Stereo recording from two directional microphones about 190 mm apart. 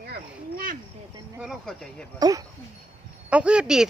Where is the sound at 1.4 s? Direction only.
Centre (ahead or behind).